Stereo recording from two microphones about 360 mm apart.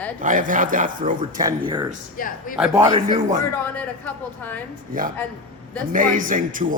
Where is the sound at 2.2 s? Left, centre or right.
Left.